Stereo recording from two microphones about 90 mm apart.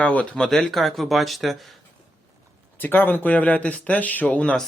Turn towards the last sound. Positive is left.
turn(degrees=15)  # may be behind; listen again after turning